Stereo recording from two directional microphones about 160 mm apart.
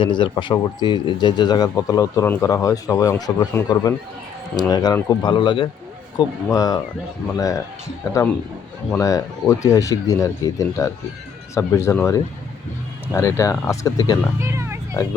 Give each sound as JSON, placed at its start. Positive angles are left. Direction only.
{"t": 0.0, "sound": "speech", "side_deg": 30}
{"t": 4.5, "sound": "a man's voice", "side_deg": 25}
{"t": 14.4, "sound": "speech", "side_deg": -15}